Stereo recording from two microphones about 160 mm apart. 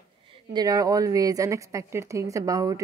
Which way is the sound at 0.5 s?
20° right (ahead or behind).